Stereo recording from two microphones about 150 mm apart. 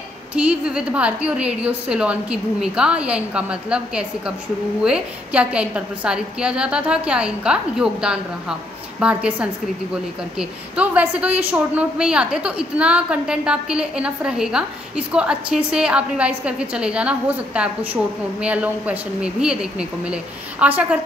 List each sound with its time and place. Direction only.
0.3 s a woman's voice: 10° right (ahead or behind)